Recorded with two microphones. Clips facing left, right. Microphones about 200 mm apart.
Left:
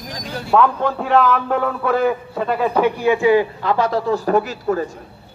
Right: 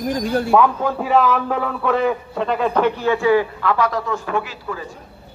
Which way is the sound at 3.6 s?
30° left (ahead or behind).